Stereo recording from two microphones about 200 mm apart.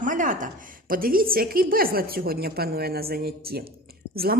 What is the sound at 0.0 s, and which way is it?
Speech, 40° right (ahead or behind).